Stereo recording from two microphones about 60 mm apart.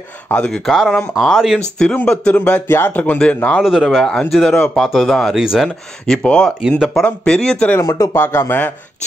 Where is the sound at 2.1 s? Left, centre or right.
Left.